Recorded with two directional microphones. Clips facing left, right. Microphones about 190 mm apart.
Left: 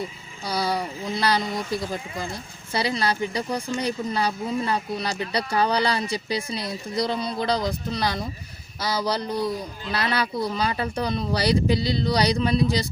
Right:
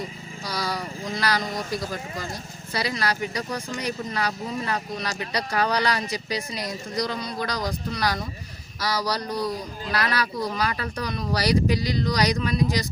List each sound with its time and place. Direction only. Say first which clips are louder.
0.4 s speech: left 4 dB; 25° left (ahead or behind)